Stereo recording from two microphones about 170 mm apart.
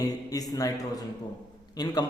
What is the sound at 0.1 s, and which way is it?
A man's voice, 20° left (ahead or behind).